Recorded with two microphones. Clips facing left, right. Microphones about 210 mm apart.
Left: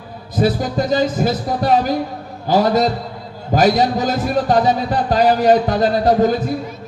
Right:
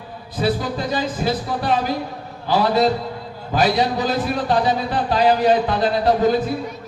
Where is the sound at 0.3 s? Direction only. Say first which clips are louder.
Left 4 dB; 45° left (ahead or behind).